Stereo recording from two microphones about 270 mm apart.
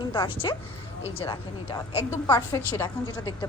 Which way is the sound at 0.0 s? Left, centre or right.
Centre.